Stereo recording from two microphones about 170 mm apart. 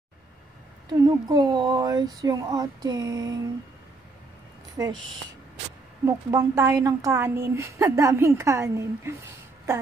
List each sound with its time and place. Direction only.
0.8 s speech: 25° right (ahead or behind)
6.0 s a woman's voice: 15° right (ahead or behind)